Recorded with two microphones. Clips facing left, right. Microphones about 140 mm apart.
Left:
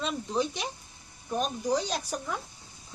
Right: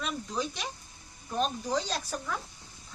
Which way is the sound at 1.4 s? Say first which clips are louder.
Left 1 dB; 15° left (ahead or behind).